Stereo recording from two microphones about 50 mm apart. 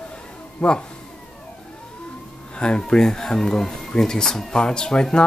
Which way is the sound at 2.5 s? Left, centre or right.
Centre.